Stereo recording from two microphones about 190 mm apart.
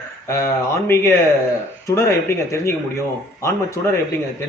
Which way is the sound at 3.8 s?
15° left (ahead or behind).